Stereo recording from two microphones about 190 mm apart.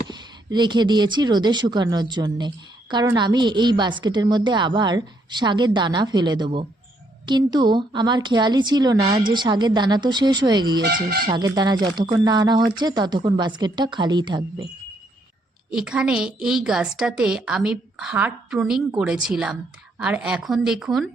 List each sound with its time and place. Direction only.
0.1 s a woman's voice: 25° right (ahead or behind)
10.8 s speech: 55° right (ahead or behind)
11.3 s a woman's voice: 20° right (ahead or behind)
15.7 s a woman's voice: 5° right (ahead or behind)